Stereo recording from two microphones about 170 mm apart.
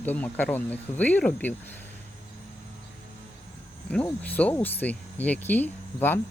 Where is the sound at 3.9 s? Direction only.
10° left (ahead or behind).